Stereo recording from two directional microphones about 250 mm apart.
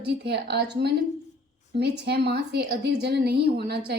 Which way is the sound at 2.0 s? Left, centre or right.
Right.